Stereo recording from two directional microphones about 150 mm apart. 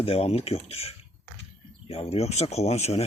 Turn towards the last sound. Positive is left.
turn(degrees=45)  # may be behind; listen again after turning